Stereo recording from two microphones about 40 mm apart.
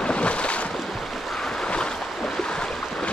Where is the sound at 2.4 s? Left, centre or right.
Left.